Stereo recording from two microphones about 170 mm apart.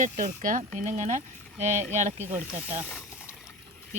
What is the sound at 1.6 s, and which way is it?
Speech, 15° right (ahead or behind).